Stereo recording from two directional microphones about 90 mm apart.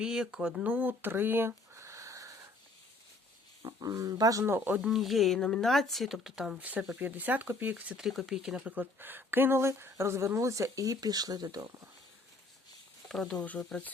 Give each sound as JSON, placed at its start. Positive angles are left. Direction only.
{"t": 0.0, "sound": "speech", "side_deg": -10}
{"t": 3.6, "sound": "speech", "side_deg": -40}
{"t": 4.4, "sound": "a woman's voice", "side_deg": -25}
{"t": 4.8, "sound": "a woman's voice", "side_deg": 0}
{"t": 7.9, "sound": "a woman's voice", "side_deg": -5}
{"t": 13.1, "sound": "speech", "side_deg": 5}